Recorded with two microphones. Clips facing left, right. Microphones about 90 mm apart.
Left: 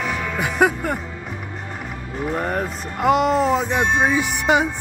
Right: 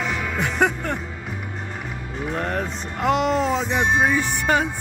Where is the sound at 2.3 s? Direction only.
5° left (ahead or behind).